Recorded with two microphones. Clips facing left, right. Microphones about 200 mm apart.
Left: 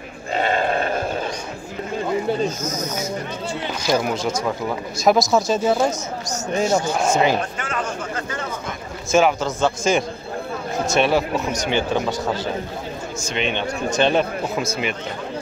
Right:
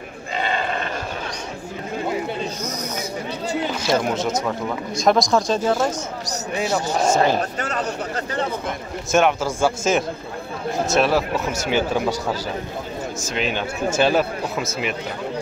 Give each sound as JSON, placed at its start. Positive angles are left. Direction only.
{"t": 0.4, "sound": "sheep", "side_deg": 45}
{"t": 3.8, "sound": "speech", "side_deg": 0}
{"t": 7.0, "sound": "speech", "side_deg": 5}
{"t": 7.6, "sound": "a sound", "side_deg": -40}
{"t": 9.1, "sound": "speech", "side_deg": 0}